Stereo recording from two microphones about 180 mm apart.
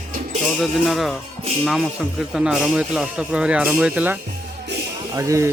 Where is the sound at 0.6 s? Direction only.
Centre (ahead or behind).